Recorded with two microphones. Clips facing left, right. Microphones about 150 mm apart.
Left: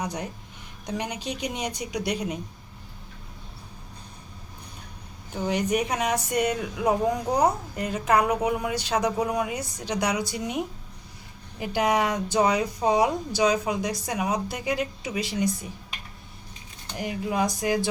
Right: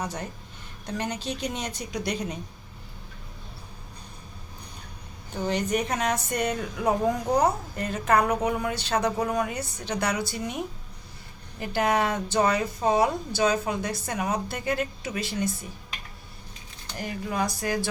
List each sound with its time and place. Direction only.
0.0 s speech: 15° left (ahead or behind)
5.5 s speech: 10° left (ahead or behind)
11.6 s speech: 15° left (ahead or behind)
17.0 s speech: 15° left (ahead or behind)